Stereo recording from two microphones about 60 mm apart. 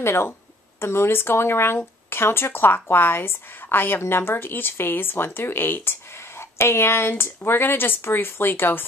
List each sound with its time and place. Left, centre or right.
0.0 s a woman's voice: left